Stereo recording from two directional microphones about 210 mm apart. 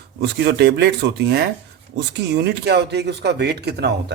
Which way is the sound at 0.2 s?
55° right (ahead or behind).